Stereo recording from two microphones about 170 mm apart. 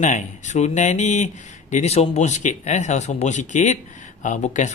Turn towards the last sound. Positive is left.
turn(degrees=45)  # may be behind; listen again after turning